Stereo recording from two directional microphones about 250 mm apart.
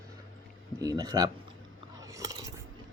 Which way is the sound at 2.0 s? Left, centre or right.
Centre.